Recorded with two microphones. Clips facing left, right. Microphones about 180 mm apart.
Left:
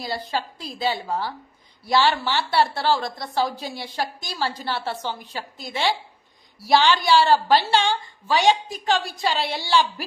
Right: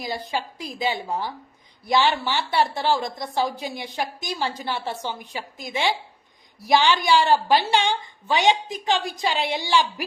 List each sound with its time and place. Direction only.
0.0 s a woman's voice: 15° right (ahead or behind)